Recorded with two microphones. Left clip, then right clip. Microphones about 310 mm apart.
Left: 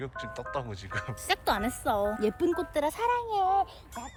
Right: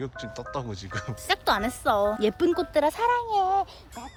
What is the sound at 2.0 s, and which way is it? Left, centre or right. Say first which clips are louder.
Speech: right 4 dB; centre.